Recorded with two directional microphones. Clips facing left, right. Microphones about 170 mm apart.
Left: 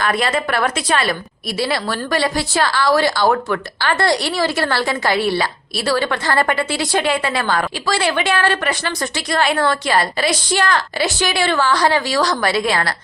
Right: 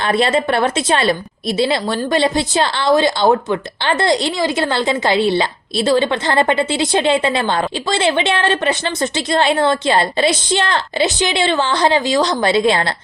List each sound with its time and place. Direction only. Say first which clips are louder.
0.0 s a woman's voice: right 3 dB; 25° right (ahead or behind)